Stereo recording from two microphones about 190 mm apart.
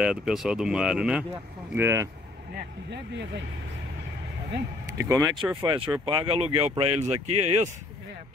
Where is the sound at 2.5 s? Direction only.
65° right (ahead or behind).